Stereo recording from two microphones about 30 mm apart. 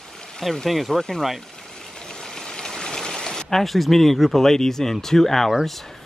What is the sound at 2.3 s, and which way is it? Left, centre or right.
Speech, left.